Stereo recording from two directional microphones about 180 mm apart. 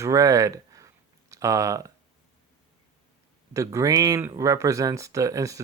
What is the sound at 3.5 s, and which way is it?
Speech, 15° right (ahead or behind).